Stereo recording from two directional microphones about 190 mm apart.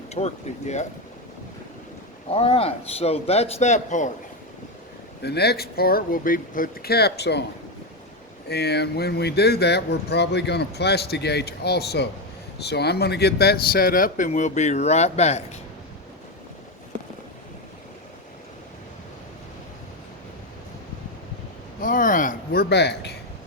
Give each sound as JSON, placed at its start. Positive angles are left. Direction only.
{"t": 0.1, "sound": "a man's voice", "side_deg": 35}
{"t": 2.3, "sound": "a man's voice", "side_deg": 30}
{"t": 5.2, "sound": "speech", "side_deg": 60}
{"t": 8.4, "sound": "speech", "side_deg": 60}
{"t": 21.8, "sound": "a sound", "side_deg": 45}
{"t": 22.7, "sound": "speech", "side_deg": 60}